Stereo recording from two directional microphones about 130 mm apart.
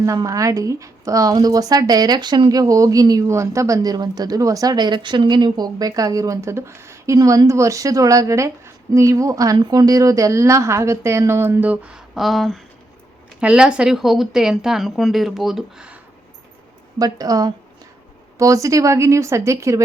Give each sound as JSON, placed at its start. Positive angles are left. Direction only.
{"t": 0.0, "sound": "a woman's voice", "side_deg": -25}
{"t": 17.0, "sound": "a woman's voice", "side_deg": -30}